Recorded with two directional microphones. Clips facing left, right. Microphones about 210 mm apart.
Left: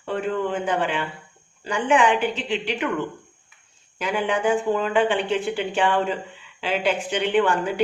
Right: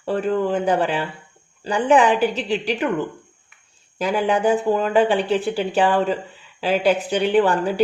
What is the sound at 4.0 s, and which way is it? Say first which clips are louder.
Speech: right 4 dB; 35° right (ahead or behind).